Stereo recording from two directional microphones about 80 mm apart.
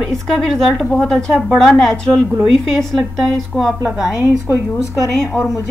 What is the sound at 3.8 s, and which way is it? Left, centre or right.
Speech, centre.